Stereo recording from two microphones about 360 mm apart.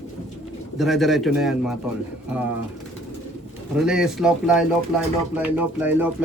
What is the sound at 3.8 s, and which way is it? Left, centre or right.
Speech, centre.